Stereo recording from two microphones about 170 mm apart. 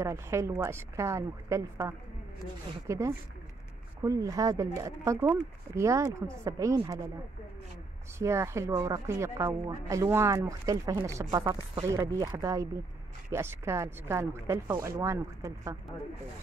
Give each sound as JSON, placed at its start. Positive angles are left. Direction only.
{"t": 0.0, "sound": "speech", "side_deg": -15}
{"t": 8.2, "sound": "speech", "side_deg": -15}